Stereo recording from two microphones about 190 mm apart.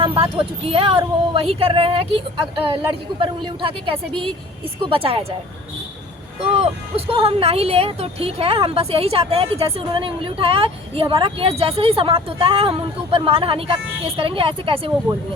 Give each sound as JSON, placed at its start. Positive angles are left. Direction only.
{"t": 0.0, "sound": "speech", "side_deg": -25}
{"t": 6.4, "sound": "speech", "side_deg": -30}